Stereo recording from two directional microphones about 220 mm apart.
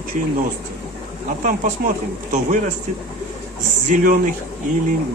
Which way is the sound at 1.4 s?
35° right (ahead or behind).